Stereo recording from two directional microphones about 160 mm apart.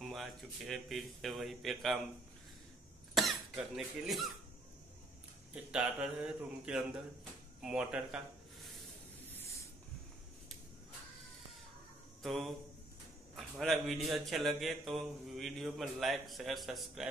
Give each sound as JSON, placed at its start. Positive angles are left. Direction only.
{"t": 0.1, "sound": "a man's voice", "side_deg": 0}
{"t": 3.2, "sound": "speech", "side_deg": 0}
{"t": 5.5, "sound": "a man's voice", "side_deg": -5}
{"t": 9.2, "sound": "spray", "side_deg": 10}
{"t": 12.2, "sound": "a man's voice", "side_deg": 0}